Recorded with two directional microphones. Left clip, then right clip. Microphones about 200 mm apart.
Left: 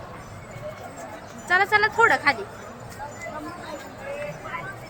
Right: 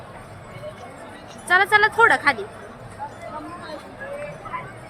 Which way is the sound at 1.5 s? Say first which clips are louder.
Right 3 dB; 15° right (ahead or behind).